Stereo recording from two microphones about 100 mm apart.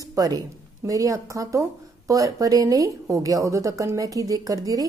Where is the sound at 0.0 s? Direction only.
35° right (ahead or behind).